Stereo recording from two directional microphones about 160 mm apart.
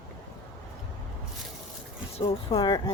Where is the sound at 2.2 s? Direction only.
30° left (ahead or behind).